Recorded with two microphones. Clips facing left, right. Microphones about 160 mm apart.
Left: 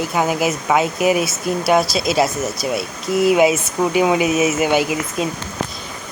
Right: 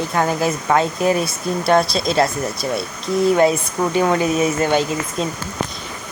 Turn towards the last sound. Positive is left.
turn(degrees=10)  # may be behind; listen again after turning